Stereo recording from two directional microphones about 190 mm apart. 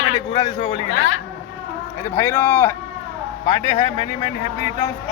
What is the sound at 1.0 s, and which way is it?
Speech, 90° left.